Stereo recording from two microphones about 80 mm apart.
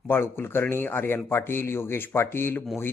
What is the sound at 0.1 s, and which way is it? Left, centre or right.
A man's voice, left.